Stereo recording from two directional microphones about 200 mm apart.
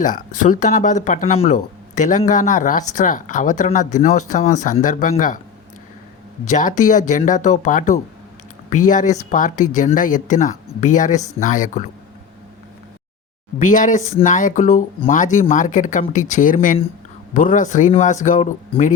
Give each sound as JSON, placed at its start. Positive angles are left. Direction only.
{"t": 0.0, "sound": "speech", "side_deg": 40}
{"t": 6.5, "sound": "speech", "side_deg": 40}
{"t": 13.6, "sound": "speech", "side_deg": 40}